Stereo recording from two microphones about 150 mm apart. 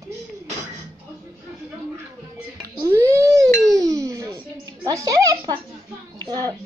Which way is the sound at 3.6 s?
25° right (ahead or behind).